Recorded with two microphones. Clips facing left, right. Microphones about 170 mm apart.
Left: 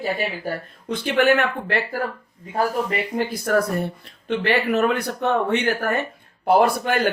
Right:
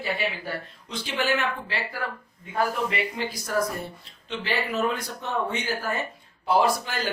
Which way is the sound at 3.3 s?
60° left (ahead or behind).